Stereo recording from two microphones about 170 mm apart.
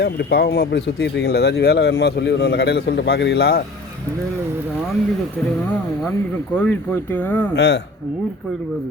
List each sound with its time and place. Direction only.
0.0 s speech: 80° left
6.1 s speech: 10° left (ahead or behind)
7.5 s speech: 90° left